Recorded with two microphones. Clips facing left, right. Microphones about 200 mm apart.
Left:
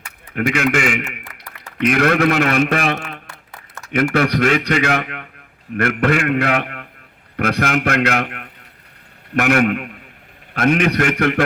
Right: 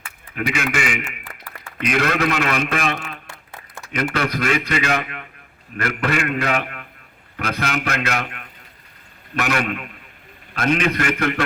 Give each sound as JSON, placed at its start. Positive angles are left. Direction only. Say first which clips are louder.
{"t": 0.3, "sound": "a man's voice", "louder": "left 6 dB", "side_deg": 55}
{"t": 4.1, "sound": "a man's voice", "louder": "left 5 dB", "side_deg": 60}